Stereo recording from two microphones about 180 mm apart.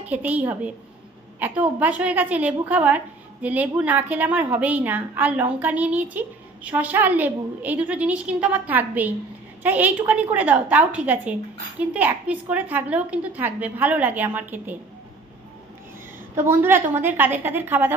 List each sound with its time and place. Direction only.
0.1 s a woman's voice: 10° right (ahead or behind)
16.3 s a woman's voice: 10° right (ahead or behind)